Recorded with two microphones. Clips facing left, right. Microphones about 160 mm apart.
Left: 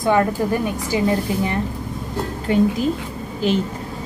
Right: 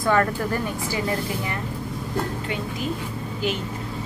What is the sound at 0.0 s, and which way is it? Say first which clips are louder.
A woman's voice: left 4 dB; 15° left (ahead or behind).